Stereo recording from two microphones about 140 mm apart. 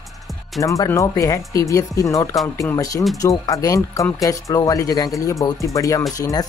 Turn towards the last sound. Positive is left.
turn(degrees=25)  # may be behind; listen again after turning